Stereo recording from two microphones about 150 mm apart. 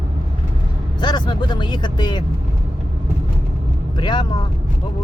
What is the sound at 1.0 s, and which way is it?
Speech, 30° left (ahead or behind).